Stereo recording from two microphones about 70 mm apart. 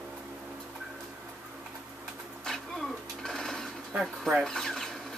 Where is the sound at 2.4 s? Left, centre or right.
Centre.